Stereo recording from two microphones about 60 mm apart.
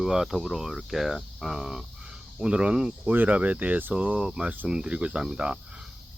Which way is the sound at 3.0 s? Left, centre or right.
Right.